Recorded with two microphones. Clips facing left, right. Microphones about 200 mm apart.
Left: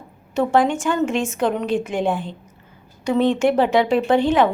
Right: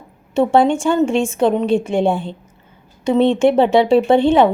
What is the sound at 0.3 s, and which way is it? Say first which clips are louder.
A woman's voice: right 4 dB; 30° right (ahead or behind).